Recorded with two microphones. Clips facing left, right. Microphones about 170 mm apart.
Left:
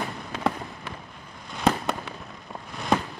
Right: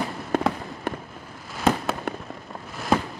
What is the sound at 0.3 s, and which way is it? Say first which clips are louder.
Fireworks: right 4 dB; 55° right (ahead or behind).